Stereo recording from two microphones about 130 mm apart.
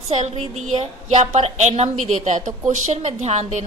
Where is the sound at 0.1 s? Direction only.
55° right (ahead or behind).